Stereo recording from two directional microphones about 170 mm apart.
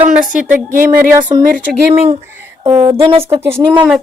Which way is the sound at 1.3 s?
20° right (ahead or behind).